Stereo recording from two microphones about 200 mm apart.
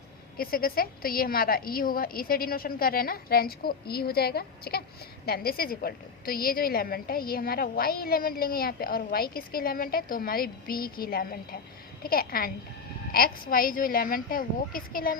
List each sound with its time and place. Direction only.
0.3 s a woman's voice: 50° left (ahead or behind)